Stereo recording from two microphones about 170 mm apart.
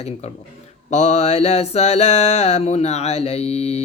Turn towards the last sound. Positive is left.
turn(degrees=35)  # may be behind; listen again after turning